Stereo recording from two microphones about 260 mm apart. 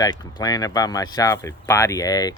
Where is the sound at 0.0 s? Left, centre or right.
Centre.